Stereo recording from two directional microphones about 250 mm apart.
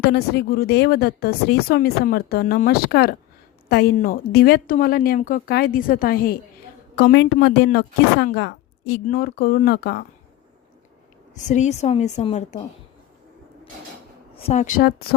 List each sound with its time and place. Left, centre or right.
0.1 s speech: left
11.3 s a woman's voice: left
14.3 s a woman's voice: left